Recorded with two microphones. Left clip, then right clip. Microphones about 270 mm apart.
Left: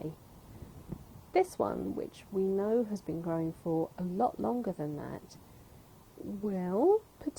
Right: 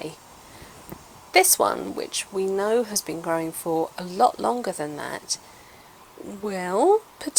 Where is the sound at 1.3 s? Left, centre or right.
Centre; by 4.5 s right.